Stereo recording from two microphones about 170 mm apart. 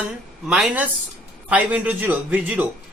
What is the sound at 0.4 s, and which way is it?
Speech, 5° right (ahead or behind).